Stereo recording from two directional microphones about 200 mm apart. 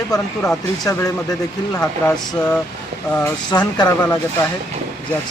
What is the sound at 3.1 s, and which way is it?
Speech, 20° left (ahead or behind).